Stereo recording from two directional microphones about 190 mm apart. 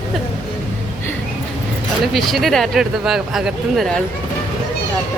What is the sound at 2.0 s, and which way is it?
Speech, centre (ahead or behind).